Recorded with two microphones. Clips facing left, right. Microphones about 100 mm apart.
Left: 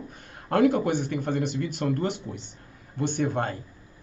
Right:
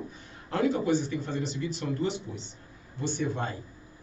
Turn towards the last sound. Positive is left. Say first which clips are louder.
# left 4 dB
turn(degrees=55)  # may be behind; listen again after turning